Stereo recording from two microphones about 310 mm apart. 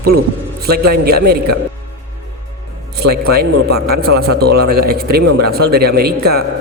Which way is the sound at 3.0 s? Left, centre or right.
Right.